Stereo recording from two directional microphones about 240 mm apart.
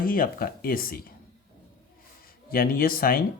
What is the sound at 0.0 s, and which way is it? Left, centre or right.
Speech, left.